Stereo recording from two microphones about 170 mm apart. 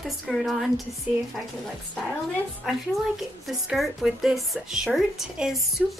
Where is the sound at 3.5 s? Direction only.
Centre (ahead or behind).